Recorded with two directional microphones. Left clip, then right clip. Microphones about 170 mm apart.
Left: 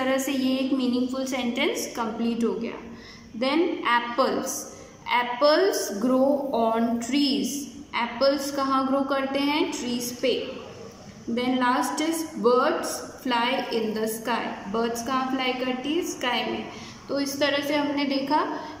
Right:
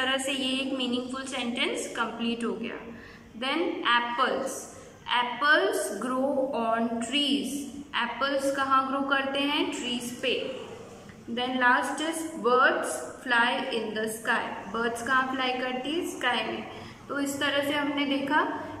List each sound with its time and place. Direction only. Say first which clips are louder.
0.0 s a woman's voice: left 2 dB; 30° left (ahead or behind)
11.3 s a woman's voice: even; 30° left (ahead or behind)